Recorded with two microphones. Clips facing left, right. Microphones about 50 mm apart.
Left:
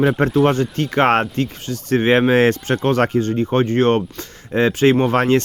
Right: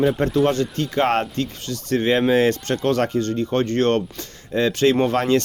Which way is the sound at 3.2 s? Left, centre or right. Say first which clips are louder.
Left 3 dB; left.